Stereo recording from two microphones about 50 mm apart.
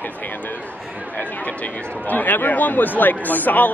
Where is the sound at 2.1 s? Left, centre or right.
Left.